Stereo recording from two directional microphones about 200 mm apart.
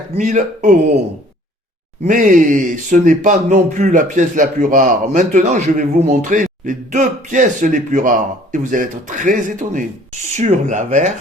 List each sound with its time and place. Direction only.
0.2 s speech: 40° right (ahead or behind)
2.0 s speech: 40° right (ahead or behind)